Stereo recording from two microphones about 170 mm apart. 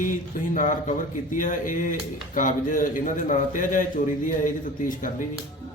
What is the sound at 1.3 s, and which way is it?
Speech, 50° left (ahead or behind).